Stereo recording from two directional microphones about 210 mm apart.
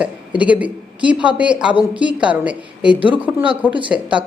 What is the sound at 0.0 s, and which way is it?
A man's voice, 5° right (ahead or behind).